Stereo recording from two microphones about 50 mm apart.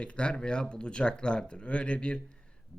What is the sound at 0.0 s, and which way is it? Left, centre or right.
Speech, left.